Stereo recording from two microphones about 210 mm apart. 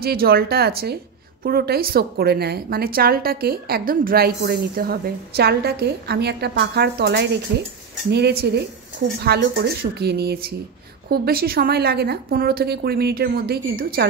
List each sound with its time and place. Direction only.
0.0 s a woman's voice: 45° right (ahead or behind)